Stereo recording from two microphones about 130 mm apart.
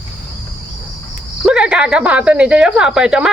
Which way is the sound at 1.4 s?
5° right (ahead or behind).